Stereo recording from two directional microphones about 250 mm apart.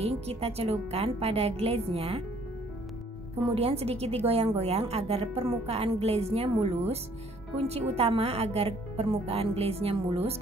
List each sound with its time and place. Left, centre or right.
0.0 s a woman's voice: right
3.5 s a woman's voice: right